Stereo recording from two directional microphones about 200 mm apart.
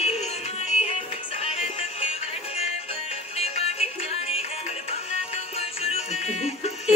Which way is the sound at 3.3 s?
30° left (ahead or behind).